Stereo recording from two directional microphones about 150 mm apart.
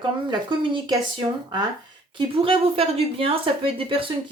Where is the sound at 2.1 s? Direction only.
35° right (ahead or behind).